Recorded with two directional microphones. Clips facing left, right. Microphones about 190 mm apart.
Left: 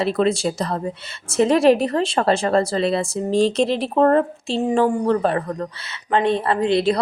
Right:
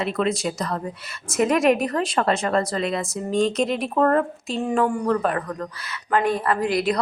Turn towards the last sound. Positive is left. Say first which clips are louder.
# left 3 dB
turn(degrees=25)  # may be behind; listen again after turning